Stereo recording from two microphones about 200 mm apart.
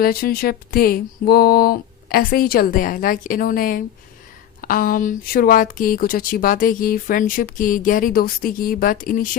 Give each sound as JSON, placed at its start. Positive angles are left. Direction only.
{"t": 0.0, "sound": "speech", "side_deg": 50}